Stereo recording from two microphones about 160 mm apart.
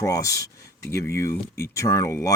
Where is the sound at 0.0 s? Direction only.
20° left (ahead or behind).